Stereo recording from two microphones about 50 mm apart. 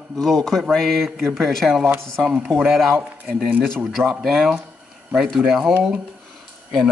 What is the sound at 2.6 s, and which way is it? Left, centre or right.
A man's voice, centre.